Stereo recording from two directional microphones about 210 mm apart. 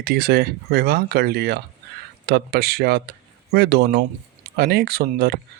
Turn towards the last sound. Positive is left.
turn(degrees=-45)  # may be behind; listen again after turning